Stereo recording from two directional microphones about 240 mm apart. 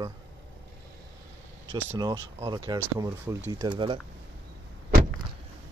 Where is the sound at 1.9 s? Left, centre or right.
Centre.